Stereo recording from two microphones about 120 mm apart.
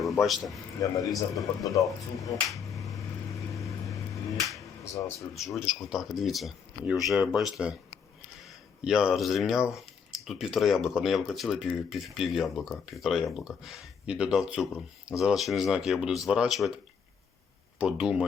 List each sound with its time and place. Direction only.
0.0 s speech: centre (ahead or behind)
0.8 s speech: 30° left (ahead or behind)
1.1 s speech: centre (ahead or behind)
1.7 s speech: 30° left (ahead or behind)
2.5 s finger snapping: centre (ahead or behind)
3.3 s a sound: 25° left (ahead or behind)
5.3 s speech: centre (ahead or behind)
17.7 s speech: 5° right (ahead or behind)